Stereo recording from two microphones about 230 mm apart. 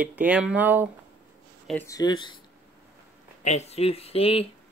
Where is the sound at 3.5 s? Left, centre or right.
Left.